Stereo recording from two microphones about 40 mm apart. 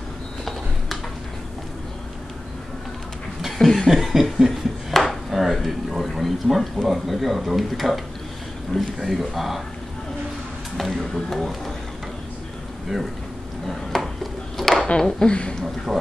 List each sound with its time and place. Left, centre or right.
3.5 s cough: centre
3.9 s chuckle: centre
4.5 s speech: centre
9.0 s speech: centre
10.8 s speech: centre
13.7 s a sound: centre
15.0 s speech: centre
15.6 s speech: centre